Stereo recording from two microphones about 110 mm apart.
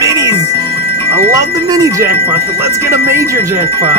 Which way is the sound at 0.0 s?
30° right (ahead or behind).